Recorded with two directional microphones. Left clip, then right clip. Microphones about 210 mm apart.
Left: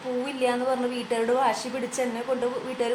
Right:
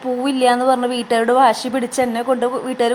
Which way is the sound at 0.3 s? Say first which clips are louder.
Right 11 dB; 45° right (ahead or behind).